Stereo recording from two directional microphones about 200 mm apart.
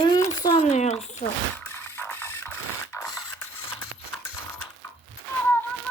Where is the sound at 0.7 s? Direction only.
35° left (ahead or behind).